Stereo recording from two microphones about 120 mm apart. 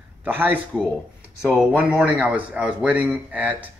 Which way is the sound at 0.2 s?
15° right (ahead or behind).